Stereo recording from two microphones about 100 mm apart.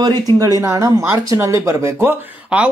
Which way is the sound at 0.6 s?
30° right (ahead or behind).